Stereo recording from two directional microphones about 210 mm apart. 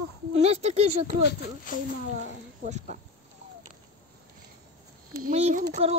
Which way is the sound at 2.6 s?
35° right (ahead or behind).